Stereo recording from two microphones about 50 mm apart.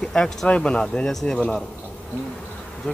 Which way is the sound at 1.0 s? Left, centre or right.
Centre.